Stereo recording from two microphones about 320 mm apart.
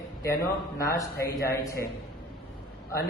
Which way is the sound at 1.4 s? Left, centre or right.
Centre.